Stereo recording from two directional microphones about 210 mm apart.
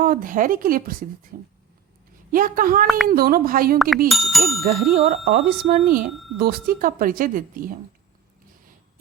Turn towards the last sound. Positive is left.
turn(degrees=-40)  # may be behind; listen again after turning